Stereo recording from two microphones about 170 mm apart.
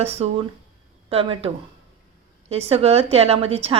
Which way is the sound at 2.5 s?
35° right (ahead or behind).